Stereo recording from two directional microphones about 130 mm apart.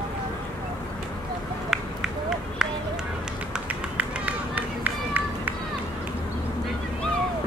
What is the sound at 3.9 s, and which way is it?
Run, 15° right (ahead or behind).